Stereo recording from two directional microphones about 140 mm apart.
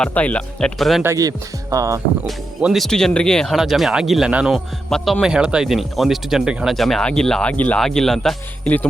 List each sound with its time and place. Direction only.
0.0 s speech: 10° left (ahead or behind)
1.0 s speech: 25° right (ahead or behind)
2.2 s speech: 5° right (ahead or behind)